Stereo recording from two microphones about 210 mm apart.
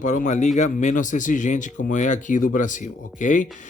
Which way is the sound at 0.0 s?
35° left (ahead or behind).